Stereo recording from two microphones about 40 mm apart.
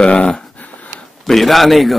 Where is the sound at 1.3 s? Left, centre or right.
Centre.